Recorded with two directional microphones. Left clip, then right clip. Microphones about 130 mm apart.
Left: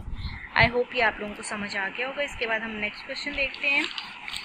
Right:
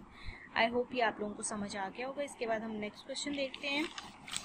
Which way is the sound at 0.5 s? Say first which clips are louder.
Left 10 dB; 10° right (ahead or behind).